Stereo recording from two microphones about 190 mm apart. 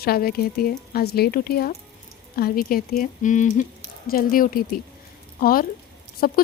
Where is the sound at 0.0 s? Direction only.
55° left (ahead or behind).